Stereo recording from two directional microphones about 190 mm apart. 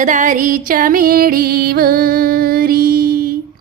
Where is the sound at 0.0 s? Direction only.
40° right (ahead or behind).